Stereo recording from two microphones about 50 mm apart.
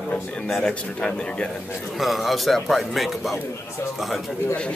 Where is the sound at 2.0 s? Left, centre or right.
Centre.